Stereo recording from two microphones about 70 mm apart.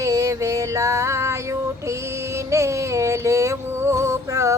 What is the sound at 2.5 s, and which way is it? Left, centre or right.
Music, right.